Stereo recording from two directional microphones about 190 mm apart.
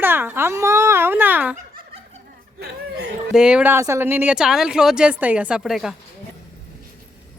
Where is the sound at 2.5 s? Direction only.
60° right (ahead or behind).